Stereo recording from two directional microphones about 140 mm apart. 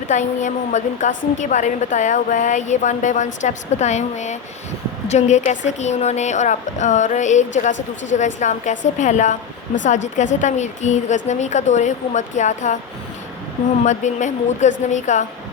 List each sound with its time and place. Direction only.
0.1 s speech: 60° left (ahead or behind)
13.8 s speech: 60° left (ahead or behind)